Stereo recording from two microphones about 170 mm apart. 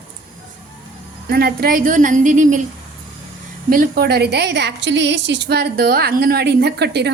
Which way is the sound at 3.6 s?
60° right (ahead or behind).